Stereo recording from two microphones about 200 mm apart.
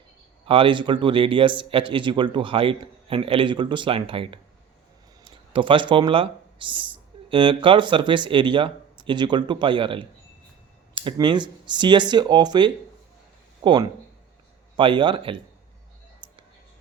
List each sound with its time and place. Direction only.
0.4 s speech: 25° right (ahead or behind)
16.2 s music: 25° right (ahead or behind)